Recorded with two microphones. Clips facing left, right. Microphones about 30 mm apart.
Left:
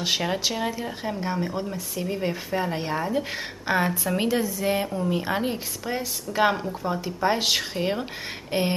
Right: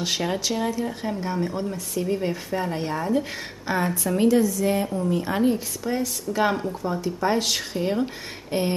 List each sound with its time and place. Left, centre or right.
0.0 s speech: centre
4.8 s speech: centre
5.1 s speech: left